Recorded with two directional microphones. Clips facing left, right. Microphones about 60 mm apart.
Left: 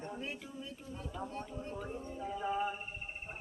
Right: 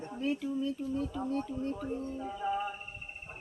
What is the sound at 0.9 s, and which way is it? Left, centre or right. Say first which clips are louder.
Speech: right 9 dB; centre.